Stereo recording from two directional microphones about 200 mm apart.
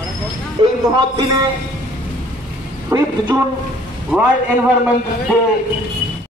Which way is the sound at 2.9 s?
15° right (ahead or behind).